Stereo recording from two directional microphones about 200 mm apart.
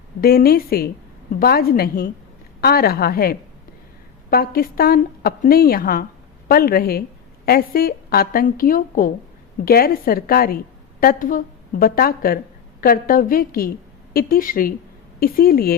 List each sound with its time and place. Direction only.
0.2 s a woman's voice: 50° left (ahead or behind)